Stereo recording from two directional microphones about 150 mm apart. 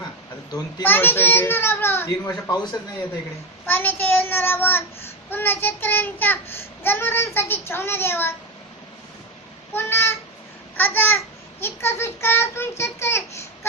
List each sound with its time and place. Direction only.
0.8 s a child's voice: 15° left (ahead or behind)
3.7 s a child's voice: 15° left (ahead or behind)
9.7 s a child's voice: 15° left (ahead or behind)